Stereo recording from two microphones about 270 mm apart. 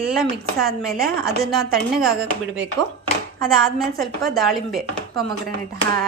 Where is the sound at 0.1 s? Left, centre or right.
Centre.